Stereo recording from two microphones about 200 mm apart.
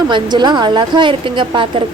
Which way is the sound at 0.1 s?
20° right (ahead or behind).